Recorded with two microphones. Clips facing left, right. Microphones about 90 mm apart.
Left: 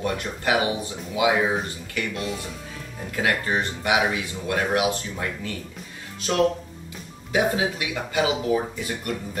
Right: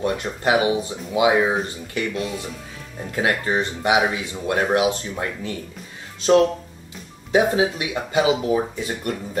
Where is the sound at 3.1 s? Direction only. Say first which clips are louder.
Right 2 dB; 25° right (ahead or behind).